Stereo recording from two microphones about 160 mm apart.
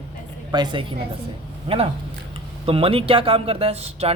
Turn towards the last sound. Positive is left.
turn(degrees=-40)  # may be behind; listen again after turning